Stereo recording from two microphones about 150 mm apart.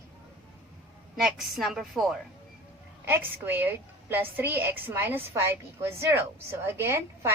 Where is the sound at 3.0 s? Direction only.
15° right (ahead or behind).